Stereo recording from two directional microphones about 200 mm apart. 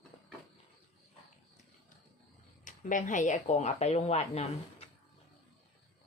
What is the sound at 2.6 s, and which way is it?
Speech, 40° left (ahead or behind).